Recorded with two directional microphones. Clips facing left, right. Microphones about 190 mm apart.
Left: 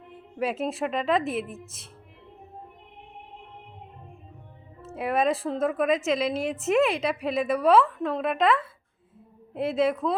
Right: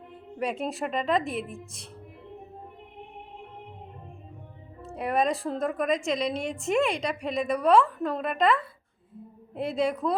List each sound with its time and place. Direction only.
0.1 s a woman's voice: 5° left (ahead or behind)
4.9 s a woman's voice: 5° left (ahead or behind)